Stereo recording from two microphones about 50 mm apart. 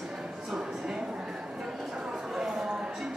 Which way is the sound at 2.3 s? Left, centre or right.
Centre.